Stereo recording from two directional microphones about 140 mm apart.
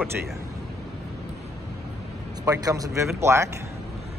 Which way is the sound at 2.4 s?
25° right (ahead or behind).